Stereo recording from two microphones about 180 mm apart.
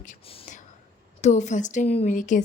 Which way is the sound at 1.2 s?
40° left (ahead or behind).